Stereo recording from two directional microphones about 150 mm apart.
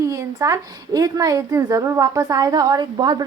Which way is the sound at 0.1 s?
20° right (ahead or behind).